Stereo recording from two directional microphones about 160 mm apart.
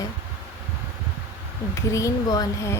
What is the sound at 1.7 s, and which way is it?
Speech, 20° left (ahead or behind).